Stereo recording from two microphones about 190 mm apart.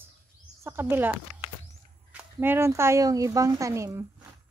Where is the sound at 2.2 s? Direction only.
10° right (ahead or behind).